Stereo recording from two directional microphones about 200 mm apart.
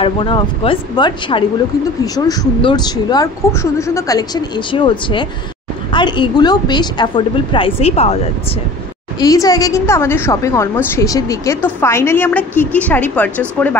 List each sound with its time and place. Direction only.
0.0 s a woman's voice: 25° left (ahead or behind)
9.2 s a woman's voice: 20° left (ahead or behind)